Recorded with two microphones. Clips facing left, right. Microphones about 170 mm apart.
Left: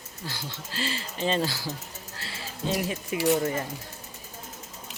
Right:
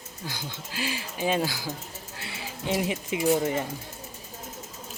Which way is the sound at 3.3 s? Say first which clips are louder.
Even; 5° right (ahead or behind).